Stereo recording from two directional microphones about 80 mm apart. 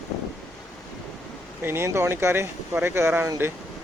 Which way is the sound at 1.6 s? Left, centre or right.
Right.